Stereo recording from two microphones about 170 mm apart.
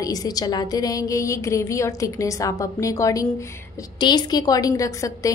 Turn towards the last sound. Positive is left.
turn(degrees=20)  # may be behind; listen again after turning